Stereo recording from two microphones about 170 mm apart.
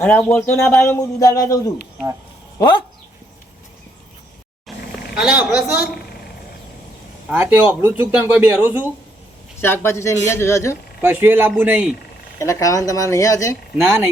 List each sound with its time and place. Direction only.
0.0 s a man's voice: 10° left (ahead or behind); by 2.8 s 25° left (ahead or behind)
5.1 s a woman's voice: 5° right (ahead or behind)
7.3 s speech: 10° right (ahead or behind)
9.6 s a man's voice: 15° left (ahead or behind)
11.0 s speech: 10° right (ahead or behind)
12.4 s speech: 20° left (ahead or behind)